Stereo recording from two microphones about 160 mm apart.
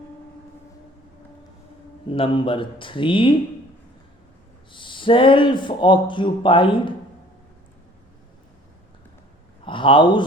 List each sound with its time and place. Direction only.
2.0 s speech: 35° left (ahead or behind)
4.7 s speech: 30° left (ahead or behind)
9.6 s a man's voice: 30° left (ahead or behind)